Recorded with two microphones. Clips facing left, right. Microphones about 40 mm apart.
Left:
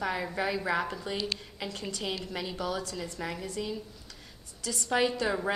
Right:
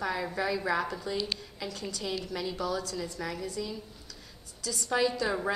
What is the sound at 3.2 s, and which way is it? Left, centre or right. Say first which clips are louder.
Speech: left 1 dB; left.